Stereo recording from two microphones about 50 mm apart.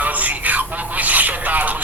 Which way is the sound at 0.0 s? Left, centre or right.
Right.